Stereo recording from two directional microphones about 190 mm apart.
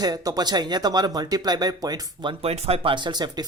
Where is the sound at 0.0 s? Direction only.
20° right (ahead or behind).